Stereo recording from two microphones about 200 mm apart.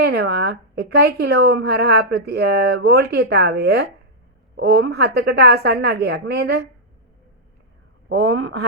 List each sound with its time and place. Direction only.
0.0 s a woman's voice: 55° right (ahead or behind)